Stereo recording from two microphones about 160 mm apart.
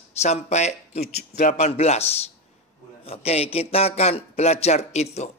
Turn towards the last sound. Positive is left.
turn(degrees=45)  # may be behind; listen again after turning